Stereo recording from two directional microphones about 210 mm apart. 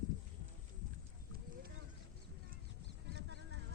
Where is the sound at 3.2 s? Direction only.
55° right (ahead or behind).